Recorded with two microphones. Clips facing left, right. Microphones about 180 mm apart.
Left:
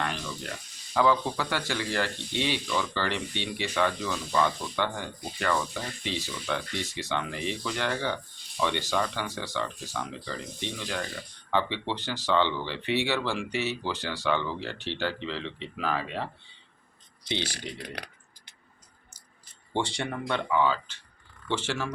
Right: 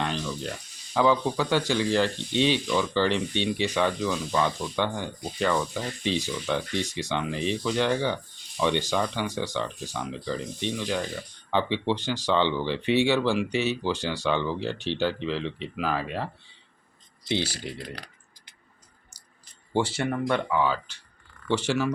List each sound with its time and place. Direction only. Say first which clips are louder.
0.0 s a sound: right 4 dB; 20° right (ahead or behind)
0.9 s speech: right 2 dB; 20° right (ahead or behind)
17.6 s speech: right 2 dB; 65° left (ahead or behind)
19.7 s speech: right 5 dB; 5° right (ahead or behind)